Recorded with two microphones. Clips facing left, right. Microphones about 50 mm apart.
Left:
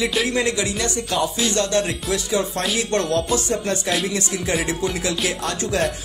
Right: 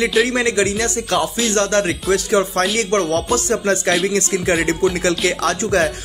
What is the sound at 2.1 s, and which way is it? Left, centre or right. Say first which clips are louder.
Speech: right 6 dB; right.